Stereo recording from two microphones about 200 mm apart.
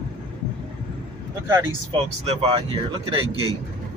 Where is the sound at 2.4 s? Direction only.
25° right (ahead or behind).